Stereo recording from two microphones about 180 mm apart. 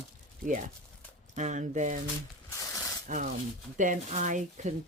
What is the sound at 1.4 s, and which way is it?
Speech, 40° right (ahead or behind).